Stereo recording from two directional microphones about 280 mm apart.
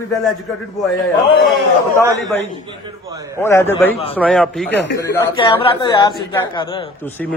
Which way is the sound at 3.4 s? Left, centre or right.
Centre.